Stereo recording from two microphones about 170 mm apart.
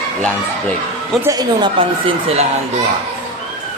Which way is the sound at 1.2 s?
20° right (ahead or behind).